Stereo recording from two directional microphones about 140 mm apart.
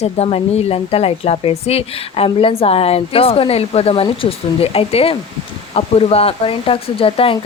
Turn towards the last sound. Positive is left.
turn(degrees=40)  # may be behind; listen again after turning